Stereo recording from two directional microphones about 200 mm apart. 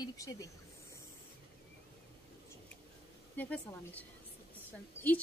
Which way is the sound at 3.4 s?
10° left (ahead or behind).